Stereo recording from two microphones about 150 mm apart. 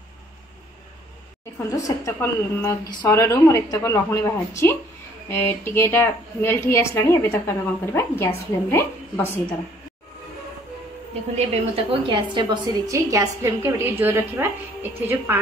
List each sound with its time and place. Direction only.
1.7 s a woman's voice: 20° left (ahead or behind)
11.3 s a woman's voice: 40° right (ahead or behind); by 15.4 s 15° right (ahead or behind)